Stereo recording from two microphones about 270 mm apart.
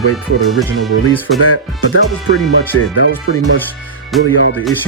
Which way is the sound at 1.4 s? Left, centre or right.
Left.